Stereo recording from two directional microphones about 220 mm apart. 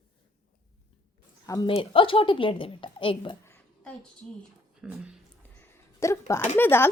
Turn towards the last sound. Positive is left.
turn(degrees=10)  # may be behind; listen again after turning